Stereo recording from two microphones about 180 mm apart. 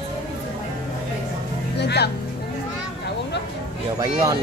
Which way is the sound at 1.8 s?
70° left (ahead or behind).